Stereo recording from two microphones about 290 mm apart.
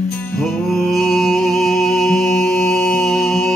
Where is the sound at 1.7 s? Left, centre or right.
Left.